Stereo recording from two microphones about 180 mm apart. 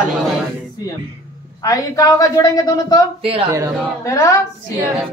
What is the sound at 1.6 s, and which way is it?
A woman's voice, 20° left (ahead or behind).